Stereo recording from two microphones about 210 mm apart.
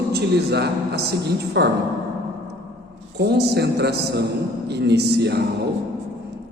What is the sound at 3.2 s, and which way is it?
A man's voice, 50° right (ahead or behind).